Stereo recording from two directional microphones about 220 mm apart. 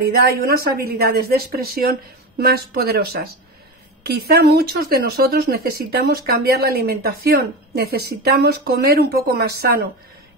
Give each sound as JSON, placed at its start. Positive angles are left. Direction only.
{"t": 0.0, "sound": "speech", "side_deg": -45}
{"t": 4.0, "sound": "speech", "side_deg": -45}